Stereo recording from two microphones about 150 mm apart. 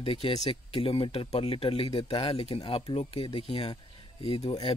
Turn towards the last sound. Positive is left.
turn(degrees=40)  # may be behind; listen again after turning